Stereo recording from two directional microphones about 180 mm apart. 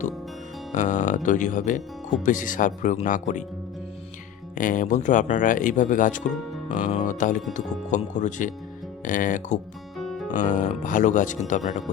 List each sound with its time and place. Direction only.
0.7 s speech: 40° left (ahead or behind)
4.5 s speech: 45° left (ahead or behind)
6.7 s music: 45° left (ahead or behind)
7.5 s speech: 45° left (ahead or behind)
10.0 s music: centre (ahead or behind)
10.2 s speech: 45° left (ahead or behind)